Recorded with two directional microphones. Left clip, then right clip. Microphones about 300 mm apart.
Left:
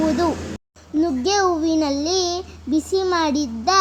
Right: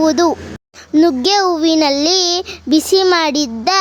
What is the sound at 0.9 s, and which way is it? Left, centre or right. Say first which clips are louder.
A child's voice: right 7 dB; right.